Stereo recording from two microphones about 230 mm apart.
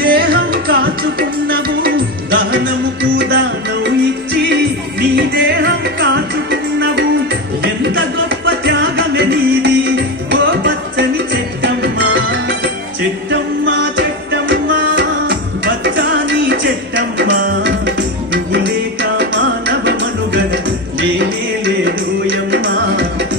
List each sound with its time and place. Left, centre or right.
0.0 s music: right
2.3 s music: right
5.1 s music: right
21.8 s music: right